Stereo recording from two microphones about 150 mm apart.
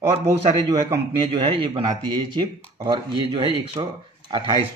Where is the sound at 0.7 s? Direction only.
25° right (ahead or behind).